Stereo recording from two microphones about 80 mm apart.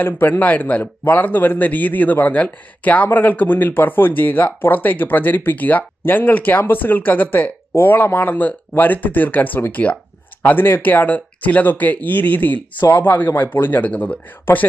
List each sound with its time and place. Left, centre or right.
0.0 s speech: left